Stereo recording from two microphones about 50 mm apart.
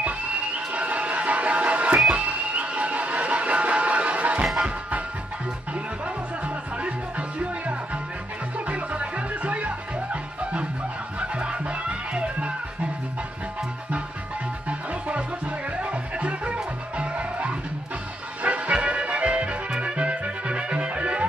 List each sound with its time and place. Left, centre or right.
0.0 s music: right
6.4 s music: right
11.1 s music: right
14.7 s music: right